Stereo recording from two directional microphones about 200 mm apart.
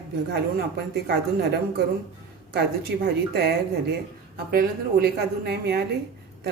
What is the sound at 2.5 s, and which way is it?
Speech, 55° right (ahead or behind).